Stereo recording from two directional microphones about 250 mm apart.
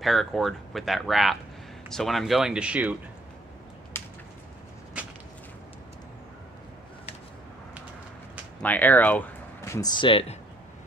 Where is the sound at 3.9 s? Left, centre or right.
Centre.